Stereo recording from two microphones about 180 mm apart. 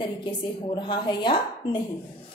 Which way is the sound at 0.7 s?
25° left (ahead or behind).